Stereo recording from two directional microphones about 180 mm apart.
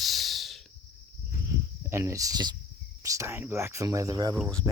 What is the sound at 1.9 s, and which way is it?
Speech, 15° right (ahead or behind).